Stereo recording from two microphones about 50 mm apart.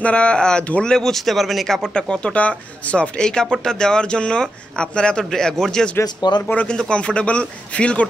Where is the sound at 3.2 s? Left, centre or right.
Centre.